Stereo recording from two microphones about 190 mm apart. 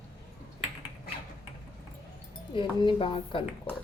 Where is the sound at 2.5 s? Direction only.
25° left (ahead or behind).